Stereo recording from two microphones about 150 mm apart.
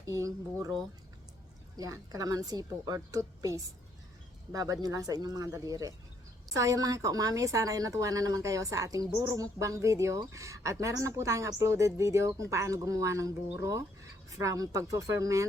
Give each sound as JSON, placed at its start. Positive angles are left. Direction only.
{"t": 0.0, "sound": "a woman's voice", "side_deg": -25}
{"t": 1.7, "sound": "a woman's voice", "side_deg": -25}